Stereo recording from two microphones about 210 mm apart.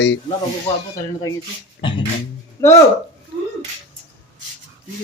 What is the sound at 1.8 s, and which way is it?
Beatboxing, 20° left (ahead or behind).